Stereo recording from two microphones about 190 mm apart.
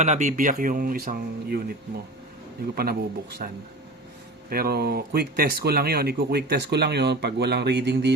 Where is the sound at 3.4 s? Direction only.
50° right (ahead or behind).